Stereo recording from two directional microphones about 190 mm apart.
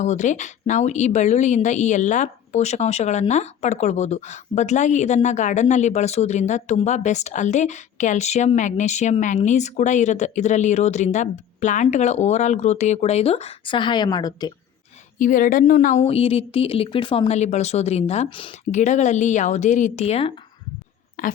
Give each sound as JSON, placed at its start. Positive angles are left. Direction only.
{"t": 0.0, "sound": "speech", "side_deg": 40}
{"t": 15.2, "sound": "speech", "side_deg": 45}
{"t": 21.2, "sound": "speech", "side_deg": 45}